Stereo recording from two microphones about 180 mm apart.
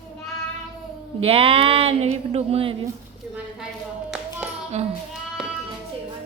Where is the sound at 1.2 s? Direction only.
35° right (ahead or behind).